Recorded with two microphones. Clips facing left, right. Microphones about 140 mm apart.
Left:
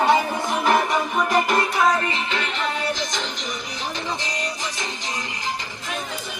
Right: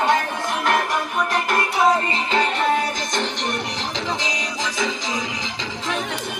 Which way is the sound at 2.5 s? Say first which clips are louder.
Right 5 dB; 50° right (ahead or behind).